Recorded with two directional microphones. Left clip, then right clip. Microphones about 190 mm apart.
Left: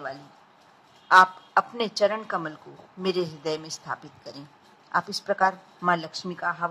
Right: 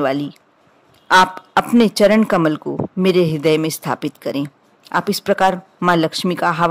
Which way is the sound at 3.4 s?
40° right (ahead or behind).